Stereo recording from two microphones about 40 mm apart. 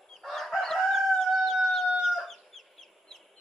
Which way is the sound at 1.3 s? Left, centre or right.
Centre.